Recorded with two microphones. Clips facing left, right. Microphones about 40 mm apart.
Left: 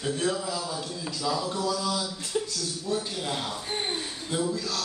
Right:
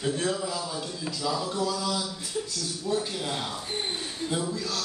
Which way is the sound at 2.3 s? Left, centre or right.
Left.